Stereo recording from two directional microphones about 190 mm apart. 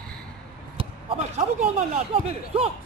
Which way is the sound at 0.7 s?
30° right (ahead or behind).